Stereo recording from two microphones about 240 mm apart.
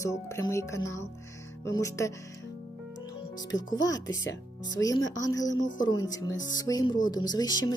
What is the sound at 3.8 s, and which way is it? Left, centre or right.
Speech, centre.